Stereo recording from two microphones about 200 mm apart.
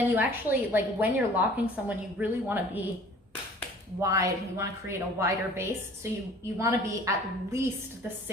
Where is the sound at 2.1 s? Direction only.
10° right (ahead or behind).